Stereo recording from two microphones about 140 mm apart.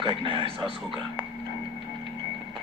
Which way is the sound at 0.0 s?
35° right (ahead or behind).